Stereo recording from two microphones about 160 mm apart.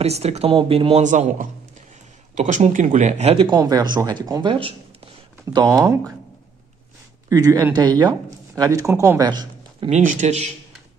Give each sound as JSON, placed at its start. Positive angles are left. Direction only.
{"t": 0.0, "sound": "speech", "side_deg": -40}
{"t": 7.2, "sound": "a man's voice", "side_deg": -25}
{"t": 9.8, "sound": "speech", "side_deg": -45}